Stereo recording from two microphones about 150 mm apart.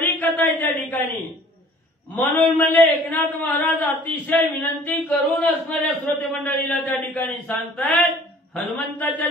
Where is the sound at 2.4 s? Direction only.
10° left (ahead or behind).